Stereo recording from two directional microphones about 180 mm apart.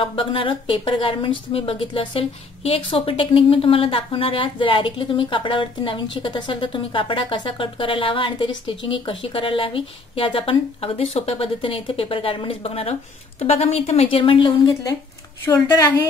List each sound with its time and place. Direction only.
0.0 s speech: 30° left (ahead or behind)